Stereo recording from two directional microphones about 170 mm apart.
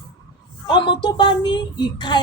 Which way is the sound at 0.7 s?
30° left (ahead or behind).